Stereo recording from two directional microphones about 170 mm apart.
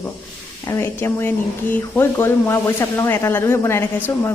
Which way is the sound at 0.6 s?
15° left (ahead or behind).